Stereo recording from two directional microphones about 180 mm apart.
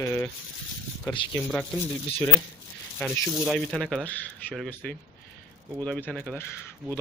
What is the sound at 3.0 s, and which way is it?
Speech, centre (ahead or behind).